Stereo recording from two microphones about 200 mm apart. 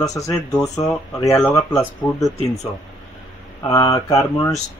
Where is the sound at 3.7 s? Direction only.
15° left (ahead or behind).